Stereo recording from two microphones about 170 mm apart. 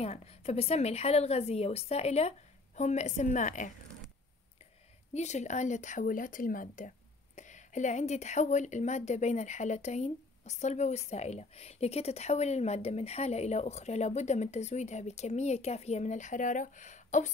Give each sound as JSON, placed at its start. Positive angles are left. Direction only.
{"t": 0.0, "sound": "a woman's voice", "side_deg": 35}
{"t": 5.1, "sound": "a woman's voice", "side_deg": 40}